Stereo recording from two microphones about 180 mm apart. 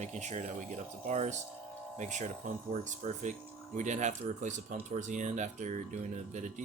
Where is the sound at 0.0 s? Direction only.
40° right (ahead or behind).